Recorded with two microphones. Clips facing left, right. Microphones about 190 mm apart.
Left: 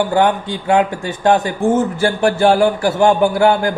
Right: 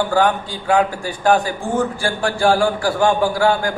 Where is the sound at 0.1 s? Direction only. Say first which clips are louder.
Left 2 dB; 20° left (ahead or behind).